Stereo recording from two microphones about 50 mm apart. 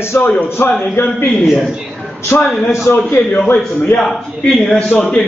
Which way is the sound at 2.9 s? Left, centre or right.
Left.